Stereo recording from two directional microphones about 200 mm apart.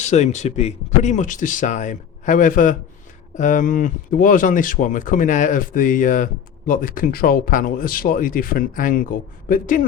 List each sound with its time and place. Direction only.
0.1 s speech: 35° left (ahead or behind)